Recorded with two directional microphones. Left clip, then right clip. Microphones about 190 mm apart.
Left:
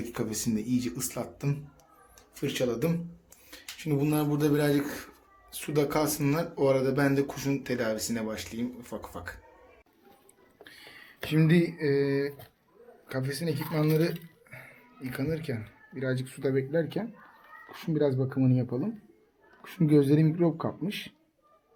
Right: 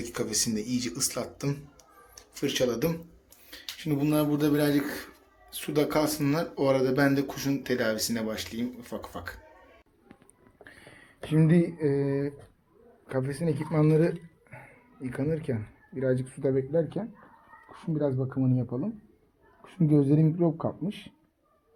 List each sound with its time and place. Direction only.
0.0 s speech: 10° left (ahead or behind)
10.6 s a sound: 35° right (ahead or behind)
11.3 s speech: 30° right (ahead or behind)
15.1 s speech: 35° right (ahead or behind)
16.7 s speech: 5° right (ahead or behind)